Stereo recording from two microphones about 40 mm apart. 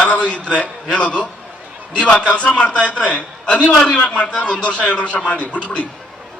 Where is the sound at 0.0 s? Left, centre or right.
Left.